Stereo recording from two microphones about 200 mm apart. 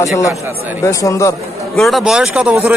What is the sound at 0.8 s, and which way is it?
Speech, 15° left (ahead or behind).